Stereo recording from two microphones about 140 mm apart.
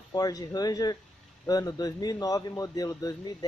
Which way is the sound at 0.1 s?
25° left (ahead or behind).